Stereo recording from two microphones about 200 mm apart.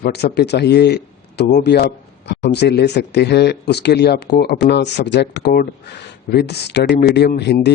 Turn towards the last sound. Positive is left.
turn(degrees=55)  # may be behind; listen again after turning